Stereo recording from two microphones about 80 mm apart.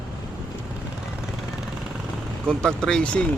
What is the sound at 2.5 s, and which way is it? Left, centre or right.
Speech, centre.